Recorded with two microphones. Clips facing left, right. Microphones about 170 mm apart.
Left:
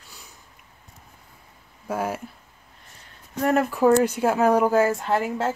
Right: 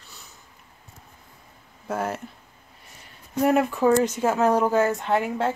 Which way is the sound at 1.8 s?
10° left (ahead or behind).